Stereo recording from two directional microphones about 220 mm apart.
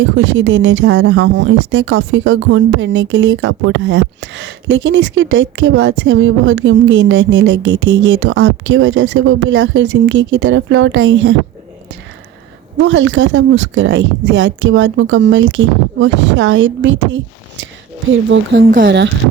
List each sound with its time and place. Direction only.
0.0 s speech: 60° right (ahead or behind)
12.8 s speech: 60° right (ahead or behind)
18.3 s speech: 45° right (ahead or behind)